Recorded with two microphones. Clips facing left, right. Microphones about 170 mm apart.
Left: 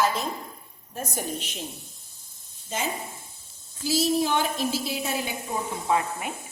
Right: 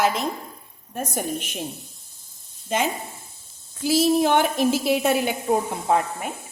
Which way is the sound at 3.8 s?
60° right (ahead or behind).